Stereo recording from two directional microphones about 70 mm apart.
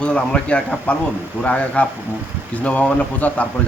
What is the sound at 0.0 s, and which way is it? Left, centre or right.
A man's voice, centre.